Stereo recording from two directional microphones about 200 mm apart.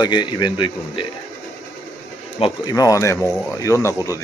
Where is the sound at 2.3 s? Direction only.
25° left (ahead or behind).